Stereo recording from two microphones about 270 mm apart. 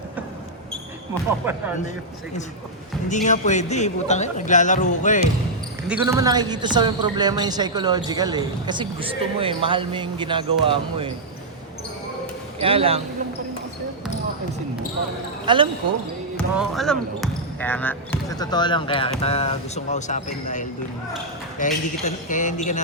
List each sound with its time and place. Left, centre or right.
1.4 s speech: centre
3.1 s speech: left
5.9 s speech: centre
12.5 s speech: right
15.5 s speech: centre
16.4 s speech: centre; by 22.8 s left